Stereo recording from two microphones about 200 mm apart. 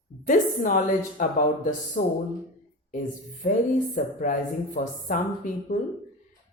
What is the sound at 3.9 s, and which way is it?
Speech, 40° left (ahead or behind).